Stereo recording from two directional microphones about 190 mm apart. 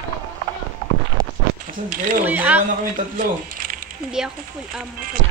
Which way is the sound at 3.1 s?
45° right (ahead or behind).